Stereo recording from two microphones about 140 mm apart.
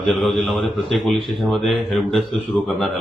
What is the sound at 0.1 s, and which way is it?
Speech, centre (ahead or behind).